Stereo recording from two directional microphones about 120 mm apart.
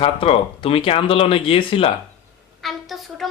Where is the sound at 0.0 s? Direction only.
50° left (ahead or behind).